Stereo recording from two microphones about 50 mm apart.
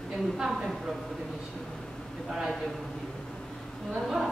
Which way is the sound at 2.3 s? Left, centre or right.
Centre.